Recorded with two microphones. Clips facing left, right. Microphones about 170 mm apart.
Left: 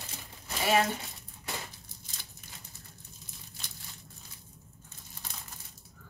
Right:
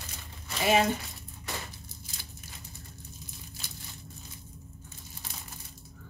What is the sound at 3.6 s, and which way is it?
Crumpling, 5° right (ahead or behind).